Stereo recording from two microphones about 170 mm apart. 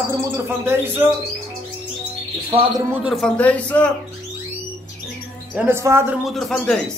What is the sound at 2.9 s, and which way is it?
Speech, 5° right (ahead or behind).